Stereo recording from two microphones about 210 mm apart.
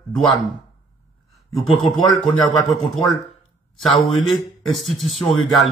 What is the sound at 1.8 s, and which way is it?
Speech, centre (ahead or behind).